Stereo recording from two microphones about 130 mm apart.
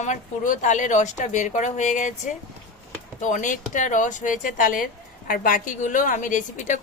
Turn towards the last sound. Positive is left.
turn(degrees=70)  # may be behind; listen again after turning